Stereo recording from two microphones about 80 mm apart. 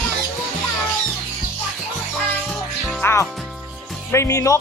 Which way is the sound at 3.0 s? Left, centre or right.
Left.